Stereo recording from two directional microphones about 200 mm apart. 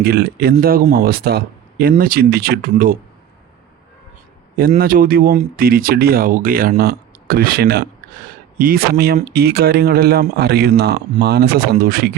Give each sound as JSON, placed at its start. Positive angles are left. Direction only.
{"t": 0.0, "sound": "speech", "side_deg": -55}
{"t": 4.5, "sound": "speech", "side_deg": -45}